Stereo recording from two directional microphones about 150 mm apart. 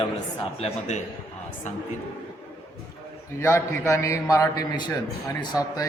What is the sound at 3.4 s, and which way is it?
A man's voice, 20° left (ahead or behind).